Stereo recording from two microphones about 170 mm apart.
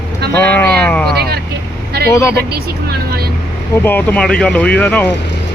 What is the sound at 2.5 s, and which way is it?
Speech, 65° right (ahead or behind).